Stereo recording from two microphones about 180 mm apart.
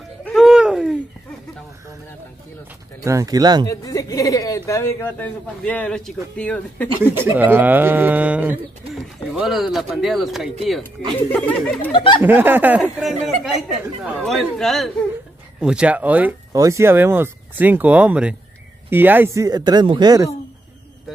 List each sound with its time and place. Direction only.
0.2 s a sound: centre (ahead or behind)
3.0 s speech: 15° right (ahead or behind)
3.6 s speech: 20° left (ahead or behind)
7.2 s speech: 10° right (ahead or behind)
11.1 s speech: 10° left (ahead or behind)
11.9 s speech: 30° left (ahead or behind)
12.2 s speech: 10° right (ahead or behind)